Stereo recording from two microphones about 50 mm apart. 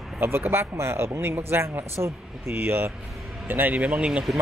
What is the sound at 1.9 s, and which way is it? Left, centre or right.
Speech, right.